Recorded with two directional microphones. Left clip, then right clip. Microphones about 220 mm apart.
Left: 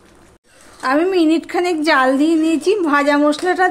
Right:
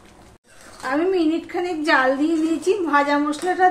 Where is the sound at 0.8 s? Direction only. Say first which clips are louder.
Left 5 dB; 50° left (ahead or behind).